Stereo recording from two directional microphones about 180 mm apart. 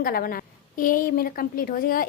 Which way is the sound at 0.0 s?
55° left (ahead or behind).